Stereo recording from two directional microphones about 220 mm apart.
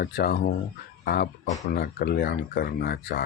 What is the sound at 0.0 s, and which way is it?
Speech, 45° left (ahead or behind).